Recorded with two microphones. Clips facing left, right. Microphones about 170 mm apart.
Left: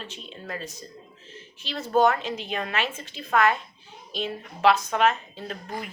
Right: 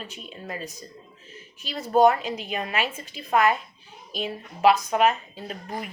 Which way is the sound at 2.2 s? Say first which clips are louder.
Right 1 dB; 40° right (ahead or behind).